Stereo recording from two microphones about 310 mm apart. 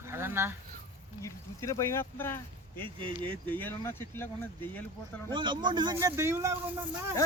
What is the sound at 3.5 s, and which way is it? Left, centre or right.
Speech, centre.